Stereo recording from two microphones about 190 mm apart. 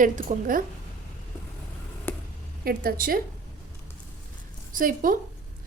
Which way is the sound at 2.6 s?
50° right (ahead or behind).